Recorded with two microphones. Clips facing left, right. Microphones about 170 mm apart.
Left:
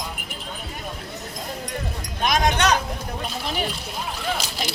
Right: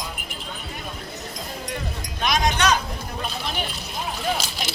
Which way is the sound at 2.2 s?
50° left (ahead or behind).